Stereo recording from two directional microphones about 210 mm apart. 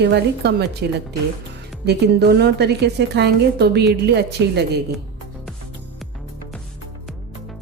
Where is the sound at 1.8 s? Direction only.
50° right (ahead or behind).